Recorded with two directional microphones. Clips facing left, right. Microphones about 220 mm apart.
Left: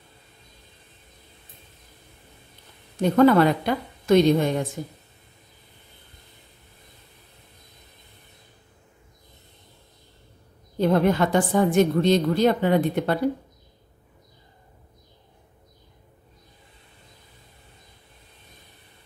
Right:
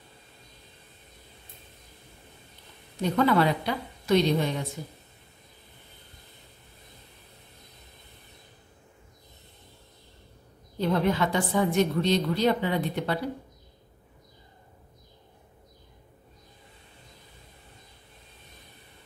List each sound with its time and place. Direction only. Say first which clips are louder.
3.0 s a woman's voice: left 7 dB; 50° left (ahead or behind)
10.8 s a woman's voice: left 5 dB; 50° left (ahead or behind)